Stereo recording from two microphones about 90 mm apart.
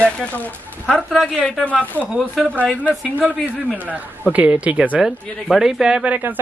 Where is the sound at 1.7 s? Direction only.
15° left (ahead or behind).